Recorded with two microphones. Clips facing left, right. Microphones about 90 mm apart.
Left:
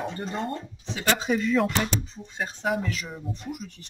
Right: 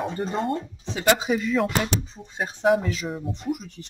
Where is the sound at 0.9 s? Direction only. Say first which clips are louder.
Right 5 dB; 20° right (ahead or behind).